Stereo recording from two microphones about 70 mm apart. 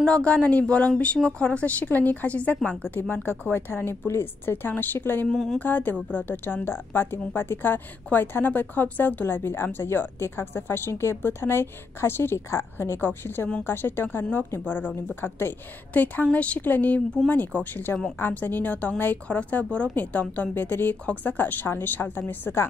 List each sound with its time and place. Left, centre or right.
0.0 s a woman's voice: centre
2.9 s a woman's voice: left
5.3 s speech: centre
5.6 s a woman's voice: left